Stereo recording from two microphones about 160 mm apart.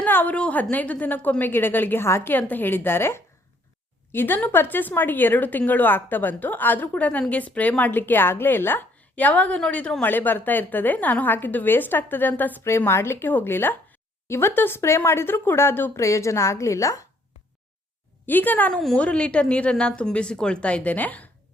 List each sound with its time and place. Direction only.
0.0 s speech: 10° left (ahead or behind)
18.3 s speech: 10° left (ahead or behind)